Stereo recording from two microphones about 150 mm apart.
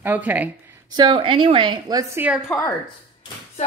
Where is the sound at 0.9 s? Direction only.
30° right (ahead or behind).